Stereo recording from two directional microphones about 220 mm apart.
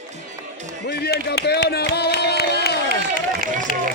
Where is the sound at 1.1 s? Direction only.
50° left (ahead or behind).